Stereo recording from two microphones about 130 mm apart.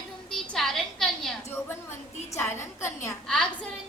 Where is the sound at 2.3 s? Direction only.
20° left (ahead or behind).